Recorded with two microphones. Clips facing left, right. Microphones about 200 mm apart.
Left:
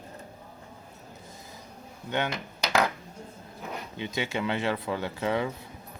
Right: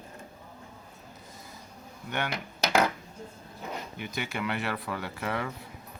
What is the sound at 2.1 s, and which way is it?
Speech, 20° left (ahead or behind).